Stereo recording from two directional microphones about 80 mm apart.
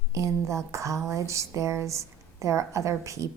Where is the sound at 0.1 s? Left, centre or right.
Right.